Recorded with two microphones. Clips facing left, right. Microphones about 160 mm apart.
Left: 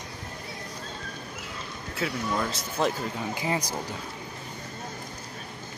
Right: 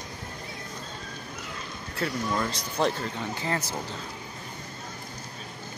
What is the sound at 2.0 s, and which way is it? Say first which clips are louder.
Speech: even; 5° left (ahead or behind).